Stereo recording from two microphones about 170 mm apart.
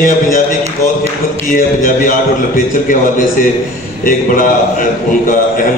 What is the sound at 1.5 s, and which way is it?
A man's voice, 55° left (ahead or behind).